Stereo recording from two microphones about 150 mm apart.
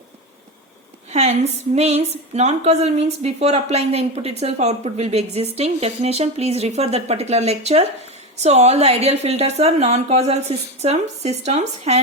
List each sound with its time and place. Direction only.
1.1 s a woman's voice: 45° right (ahead or behind)